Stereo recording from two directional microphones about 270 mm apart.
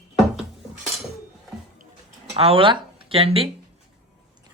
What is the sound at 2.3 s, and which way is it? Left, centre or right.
Speech, right.